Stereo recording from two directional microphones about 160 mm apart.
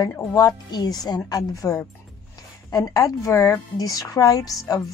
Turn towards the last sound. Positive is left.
turn(degrees=20)  # may be behind; listen again after turning